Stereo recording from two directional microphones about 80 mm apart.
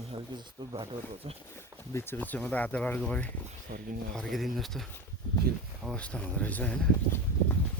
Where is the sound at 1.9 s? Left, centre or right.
Left.